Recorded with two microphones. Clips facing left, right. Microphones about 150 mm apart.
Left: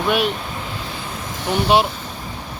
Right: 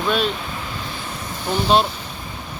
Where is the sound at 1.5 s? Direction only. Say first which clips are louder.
Left 1 dB; 15° left (ahead or behind).